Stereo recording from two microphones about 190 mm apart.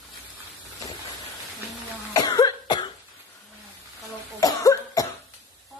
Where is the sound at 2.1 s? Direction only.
20° left (ahead or behind).